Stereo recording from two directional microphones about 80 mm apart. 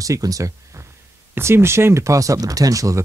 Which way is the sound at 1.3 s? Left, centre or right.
Right.